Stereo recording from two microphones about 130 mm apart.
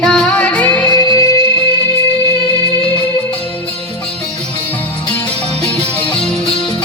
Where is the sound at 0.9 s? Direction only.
30° left (ahead or behind).